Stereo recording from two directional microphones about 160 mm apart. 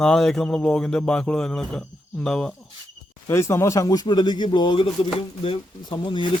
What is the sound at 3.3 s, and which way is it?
Speech, 15° left (ahead or behind).